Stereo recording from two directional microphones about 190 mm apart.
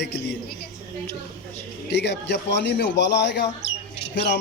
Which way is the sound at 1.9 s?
65° left (ahead or behind).